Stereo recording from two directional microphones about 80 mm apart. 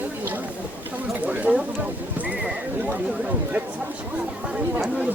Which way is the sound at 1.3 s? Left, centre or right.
Centre.